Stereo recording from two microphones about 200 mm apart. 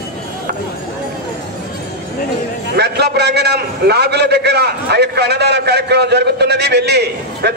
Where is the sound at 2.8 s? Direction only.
55° right (ahead or behind).